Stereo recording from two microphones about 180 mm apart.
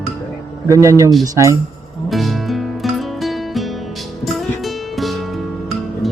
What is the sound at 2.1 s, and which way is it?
Music, centre (ahead or behind).